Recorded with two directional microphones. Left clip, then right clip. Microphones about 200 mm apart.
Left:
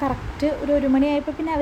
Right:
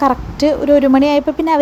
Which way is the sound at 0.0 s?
30° right (ahead or behind).